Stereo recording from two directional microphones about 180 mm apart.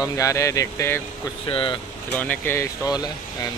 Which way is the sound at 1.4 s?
30° left (ahead or behind).